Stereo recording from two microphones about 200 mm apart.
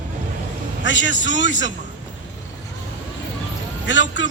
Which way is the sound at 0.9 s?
70° left (ahead or behind).